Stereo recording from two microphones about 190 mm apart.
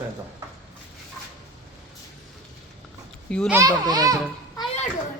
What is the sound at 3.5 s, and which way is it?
Speech, 20° right (ahead or behind).